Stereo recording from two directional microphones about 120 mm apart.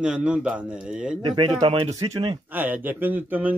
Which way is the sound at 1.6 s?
60° right (ahead or behind).